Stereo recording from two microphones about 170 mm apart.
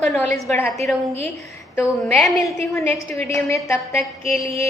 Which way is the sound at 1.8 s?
5° left (ahead or behind).